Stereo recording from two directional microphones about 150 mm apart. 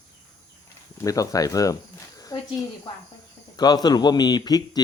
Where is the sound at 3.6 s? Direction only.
25° left (ahead or behind).